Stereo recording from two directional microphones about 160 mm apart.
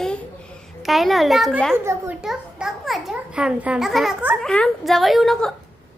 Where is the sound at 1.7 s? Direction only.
15° right (ahead or behind).